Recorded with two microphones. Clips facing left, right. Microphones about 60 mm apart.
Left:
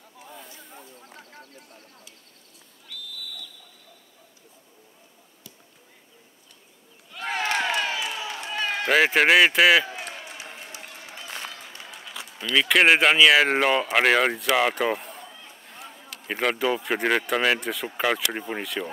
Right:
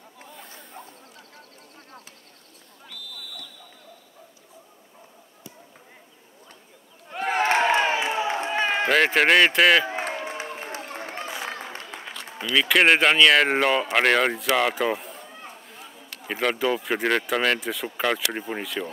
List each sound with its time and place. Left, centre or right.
0.3 s snake: centre
1.1 s a sound: left
7.3 s crowd: right
8.8 s speech: centre
9.8 s run: right
11.4 s a sound: right
12.4 s speech: centre